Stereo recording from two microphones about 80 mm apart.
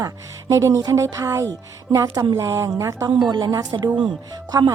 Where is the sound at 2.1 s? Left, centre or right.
Right.